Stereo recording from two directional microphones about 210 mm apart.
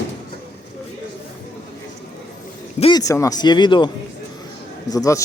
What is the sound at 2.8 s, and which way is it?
A man's voice, 20° left (ahead or behind).